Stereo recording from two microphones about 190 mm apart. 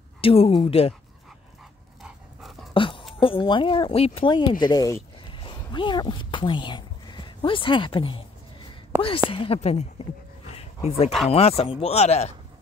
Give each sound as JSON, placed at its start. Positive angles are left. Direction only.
{"t": 0.2, "sound": "speech", "side_deg": 30}
{"t": 2.0, "sound": "dog", "side_deg": 0}
{"t": 2.7, "sound": "a sound", "side_deg": 25}
{"t": 3.2, "sound": "speech", "side_deg": 25}
{"t": 9.3, "sound": "speech", "side_deg": 30}